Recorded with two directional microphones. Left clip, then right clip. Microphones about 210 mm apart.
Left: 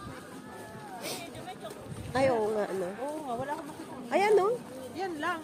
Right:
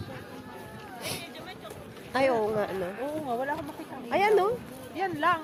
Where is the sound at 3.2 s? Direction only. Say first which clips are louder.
Right 5 dB; 45° right (ahead or behind).